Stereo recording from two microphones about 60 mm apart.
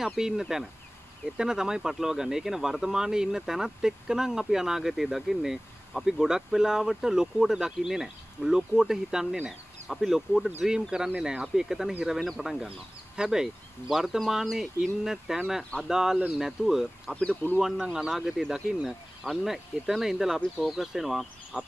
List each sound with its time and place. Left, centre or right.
0.0 s speech: centre
17.1 s speech: centre
17.6 s speech: centre